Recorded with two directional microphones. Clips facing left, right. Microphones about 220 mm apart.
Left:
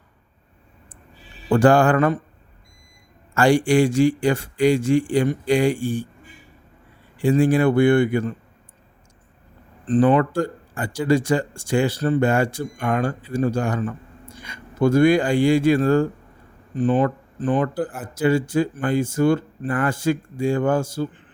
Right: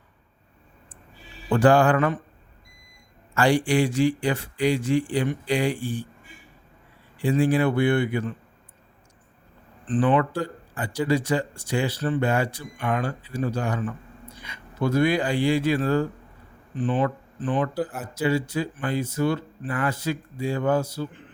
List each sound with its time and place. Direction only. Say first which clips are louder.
1.5 s speech: left 3 dB; 45° left (ahead or behind)
3.3 s speech: left 4 dB; 45° left (ahead or behind)
7.2 s speech: left 4 dB; 45° left (ahead or behind)
9.8 s speech: left 5 dB; 40° left (ahead or behind)